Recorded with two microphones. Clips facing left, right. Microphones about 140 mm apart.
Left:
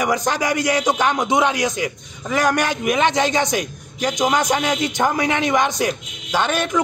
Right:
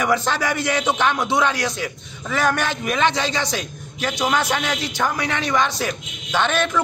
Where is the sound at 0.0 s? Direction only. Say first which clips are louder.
Left 1 dB; 15° left (ahead or behind).